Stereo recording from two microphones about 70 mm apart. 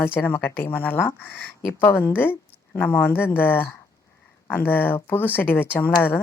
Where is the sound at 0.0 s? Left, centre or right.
Left.